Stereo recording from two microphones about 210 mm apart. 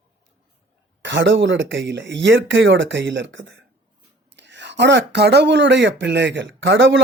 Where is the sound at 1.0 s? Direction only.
60° right (ahead or behind).